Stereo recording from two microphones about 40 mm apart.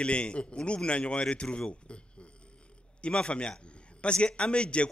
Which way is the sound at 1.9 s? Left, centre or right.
Left.